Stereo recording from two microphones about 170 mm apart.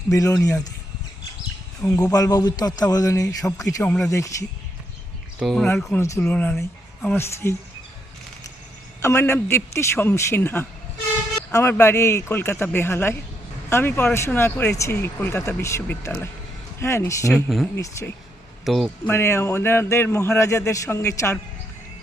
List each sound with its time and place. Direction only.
0.1 s speech: 20° left (ahead or behind)
1.8 s speech: 15° left (ahead or behind)
3.8 s speech: 5° left (ahead or behind)
4.1 s speech: 20° left (ahead or behind)
5.4 s speech: centre (ahead or behind); by 7.5 s 15° left (ahead or behind)
9.0 s speech: 15° left (ahead or behind)
17.3 s speech: centre (ahead or behind)
19.0 s speech: 15° left (ahead or behind)